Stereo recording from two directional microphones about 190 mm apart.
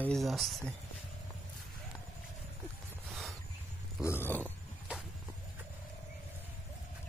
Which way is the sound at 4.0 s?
10° left (ahead or behind).